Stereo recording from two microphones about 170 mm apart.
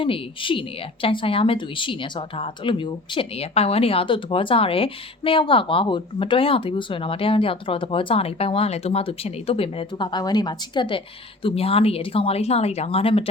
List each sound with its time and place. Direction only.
0.0 s a woman's voice: 30° left (ahead or behind)